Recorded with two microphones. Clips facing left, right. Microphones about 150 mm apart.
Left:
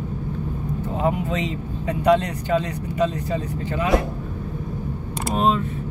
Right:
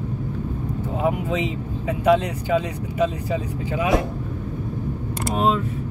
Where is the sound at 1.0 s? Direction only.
5° right (ahead or behind).